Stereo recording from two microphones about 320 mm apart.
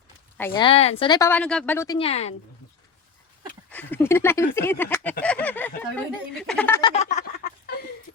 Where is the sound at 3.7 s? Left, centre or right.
Centre.